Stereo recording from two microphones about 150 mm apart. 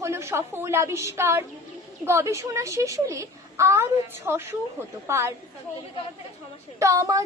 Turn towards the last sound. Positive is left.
turn(degrees=-20)  # may be behind; listen again after turning